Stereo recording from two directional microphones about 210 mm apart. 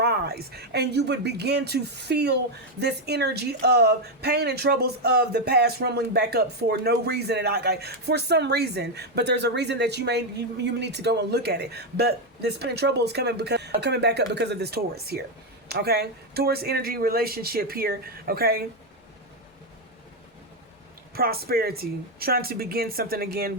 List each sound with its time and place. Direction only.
0.0 s speech: 50° right (ahead or behind)
21.2 s speech: 45° right (ahead or behind)